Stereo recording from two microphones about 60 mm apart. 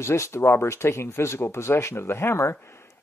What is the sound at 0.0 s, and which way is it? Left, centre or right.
Speech, left.